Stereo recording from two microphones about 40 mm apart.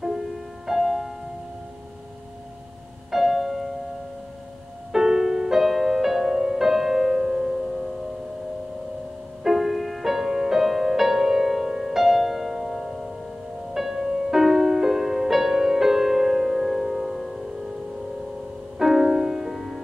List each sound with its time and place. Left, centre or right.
0.0 s music: centre
3.1 s music: centre
4.9 s music: centre
9.4 s music: centre
18.8 s music: centre